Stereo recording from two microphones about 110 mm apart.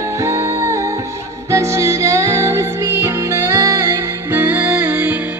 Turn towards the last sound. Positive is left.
turn(degrees=-15)  # may be behind; listen again after turning